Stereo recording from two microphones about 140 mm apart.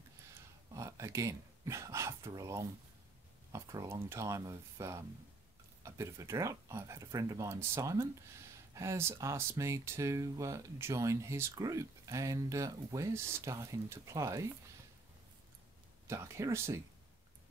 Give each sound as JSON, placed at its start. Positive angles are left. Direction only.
{"t": 0.3, "sound": "a sound", "side_deg": -20}
{"t": 3.5, "sound": "speech", "side_deg": -25}
{"t": 16.1, "sound": "speech", "side_deg": -20}